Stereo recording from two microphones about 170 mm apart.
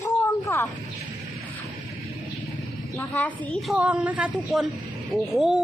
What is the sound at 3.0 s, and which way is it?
A woman's voice, 10° left (ahead or behind).